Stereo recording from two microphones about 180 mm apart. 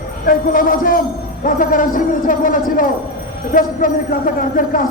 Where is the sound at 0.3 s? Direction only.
50° left (ahead or behind).